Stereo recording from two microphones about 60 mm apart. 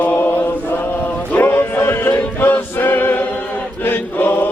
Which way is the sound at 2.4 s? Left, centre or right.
Left.